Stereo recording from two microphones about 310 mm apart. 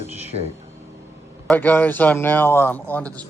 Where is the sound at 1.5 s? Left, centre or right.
Centre.